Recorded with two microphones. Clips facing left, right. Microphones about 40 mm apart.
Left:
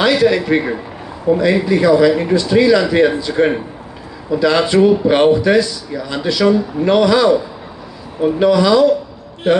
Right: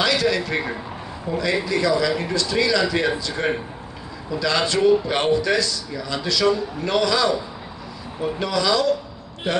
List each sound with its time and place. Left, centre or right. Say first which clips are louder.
0.0 s a man's voice: left 7 dB; left